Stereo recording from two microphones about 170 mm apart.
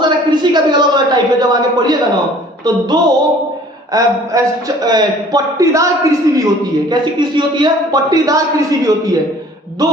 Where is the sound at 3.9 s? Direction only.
20° right (ahead or behind).